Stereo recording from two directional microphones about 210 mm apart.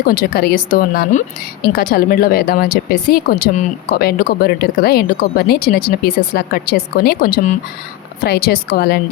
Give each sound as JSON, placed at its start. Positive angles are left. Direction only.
{"t": 0.0, "sound": "speech", "side_deg": 45}